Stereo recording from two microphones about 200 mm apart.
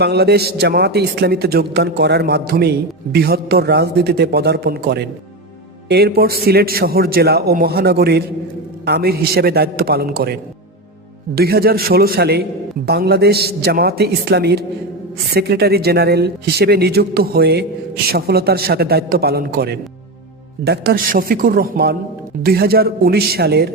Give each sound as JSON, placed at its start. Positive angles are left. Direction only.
{"t": 0.0, "sound": "a man's voice", "side_deg": -55}
{"t": 11.3, "sound": "a man's voice", "side_deg": -50}